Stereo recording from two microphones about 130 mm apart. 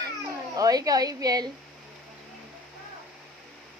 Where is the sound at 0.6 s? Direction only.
30° right (ahead or behind).